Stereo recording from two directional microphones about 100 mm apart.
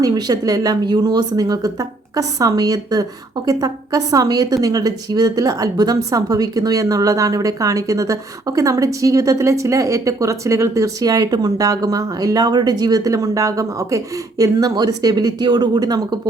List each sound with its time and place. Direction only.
0.0 s a woman's voice: 40° right (ahead or behind)